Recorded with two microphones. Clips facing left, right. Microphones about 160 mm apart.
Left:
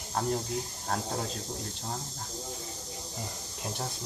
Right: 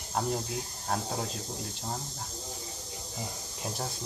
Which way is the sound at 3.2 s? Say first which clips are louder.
Right 2 dB; centre (ahead or behind).